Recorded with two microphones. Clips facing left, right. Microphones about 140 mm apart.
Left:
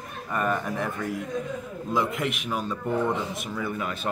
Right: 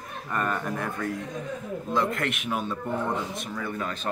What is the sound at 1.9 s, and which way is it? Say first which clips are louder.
Speech: left 1 dB; 5° left (ahead or behind).